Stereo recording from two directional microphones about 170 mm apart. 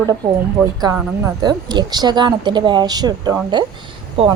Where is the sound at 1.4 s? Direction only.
25° right (ahead or behind).